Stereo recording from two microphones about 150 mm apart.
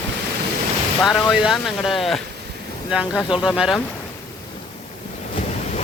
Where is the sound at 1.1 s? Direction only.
5° right (ahead or behind).